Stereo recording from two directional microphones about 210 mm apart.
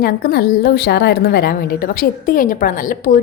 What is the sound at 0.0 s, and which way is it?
A woman's voice, 45° left (ahead or behind).